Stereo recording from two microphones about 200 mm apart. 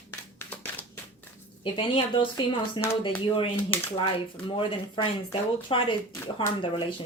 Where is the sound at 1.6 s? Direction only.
25° left (ahead or behind).